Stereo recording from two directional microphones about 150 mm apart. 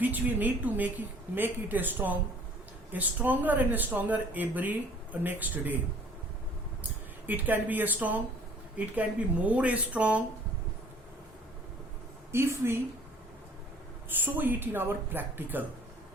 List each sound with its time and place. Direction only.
0.0 s a woman's voice: 10° right (ahead or behind)
7.3 s a woman's voice: 10° right (ahead or behind)
12.3 s a woman's voice: 15° right (ahead or behind)
14.2 s a woman's voice: 10° right (ahead or behind)